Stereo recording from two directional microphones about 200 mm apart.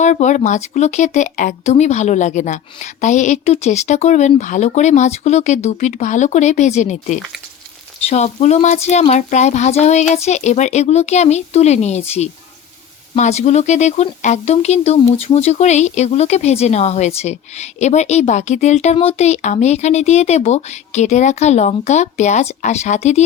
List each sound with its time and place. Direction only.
0.0 s speech: 35° left (ahead or behind)